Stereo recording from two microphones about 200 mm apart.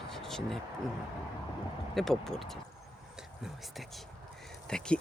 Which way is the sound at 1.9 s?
Centre (ahead or behind).